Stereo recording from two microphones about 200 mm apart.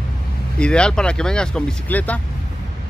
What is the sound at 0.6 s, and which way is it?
Speech, 5° left (ahead or behind).